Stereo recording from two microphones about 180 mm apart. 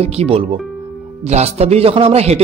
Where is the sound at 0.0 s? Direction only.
35° right (ahead or behind).